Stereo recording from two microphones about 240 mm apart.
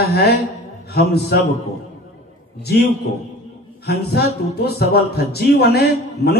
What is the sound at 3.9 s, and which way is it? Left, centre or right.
Speech, left.